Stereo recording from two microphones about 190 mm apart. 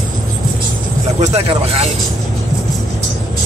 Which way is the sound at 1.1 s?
30° right (ahead or behind).